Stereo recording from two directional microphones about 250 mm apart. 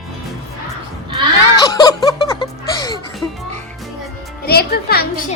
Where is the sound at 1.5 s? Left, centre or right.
Centre.